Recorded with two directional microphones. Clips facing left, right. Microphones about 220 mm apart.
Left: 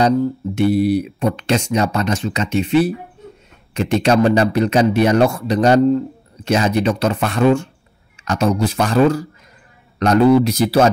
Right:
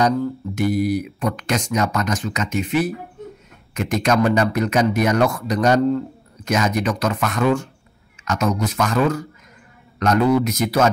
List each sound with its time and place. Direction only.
0.6 s a man's voice: 30° left (ahead or behind)